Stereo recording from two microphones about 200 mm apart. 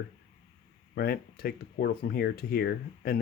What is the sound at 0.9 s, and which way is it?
Speech, 50° left (ahead or behind).